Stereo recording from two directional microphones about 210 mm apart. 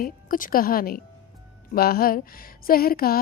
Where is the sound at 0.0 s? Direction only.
40° left (ahead or behind).